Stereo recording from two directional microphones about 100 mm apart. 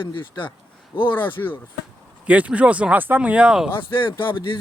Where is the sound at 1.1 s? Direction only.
20° left (ahead or behind).